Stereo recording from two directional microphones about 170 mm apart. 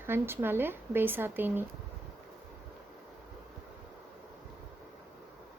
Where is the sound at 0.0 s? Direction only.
15° right (ahead or behind).